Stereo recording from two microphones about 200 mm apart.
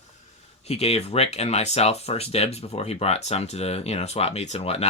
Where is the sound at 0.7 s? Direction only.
30° left (ahead or behind).